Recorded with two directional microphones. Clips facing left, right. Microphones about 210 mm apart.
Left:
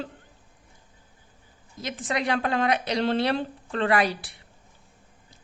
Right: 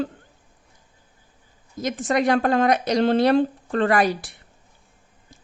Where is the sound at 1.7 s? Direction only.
45° right (ahead or behind).